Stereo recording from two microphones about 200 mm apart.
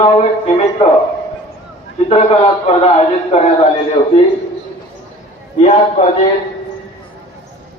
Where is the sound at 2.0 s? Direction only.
30° left (ahead or behind).